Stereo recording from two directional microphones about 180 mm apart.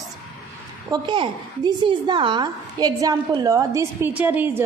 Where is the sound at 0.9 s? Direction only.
25° right (ahead or behind).